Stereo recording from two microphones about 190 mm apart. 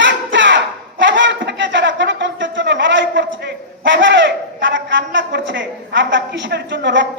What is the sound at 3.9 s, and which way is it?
A woman's voice, 75° right (ahead or behind).